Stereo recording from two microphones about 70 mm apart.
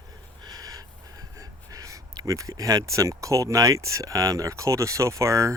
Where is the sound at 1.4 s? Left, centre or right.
Right.